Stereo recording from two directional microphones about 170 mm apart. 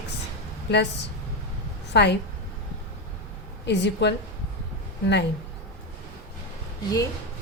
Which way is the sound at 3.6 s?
85° left.